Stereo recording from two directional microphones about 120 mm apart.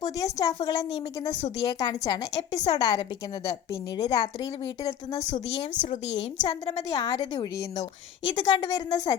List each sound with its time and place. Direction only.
0.0 s a woman's voice: 30° left (ahead or behind)
5.2 s speech: 90° left
6.5 s a woman's voice: 55° left (ahead or behind)
6.9 s a woman's voice: 40° left (ahead or behind)